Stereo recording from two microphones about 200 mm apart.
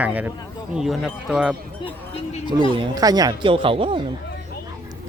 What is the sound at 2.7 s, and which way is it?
Speech, 20° right (ahead or behind).